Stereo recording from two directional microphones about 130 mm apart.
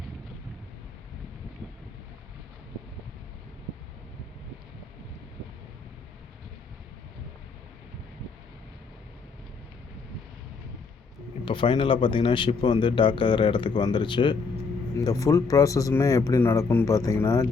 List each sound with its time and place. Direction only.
11.4 s speech: 40° left (ahead or behind)
14.9 s speech: 25° left (ahead or behind)